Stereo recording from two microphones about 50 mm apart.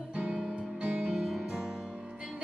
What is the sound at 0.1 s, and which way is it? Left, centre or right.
Music, centre.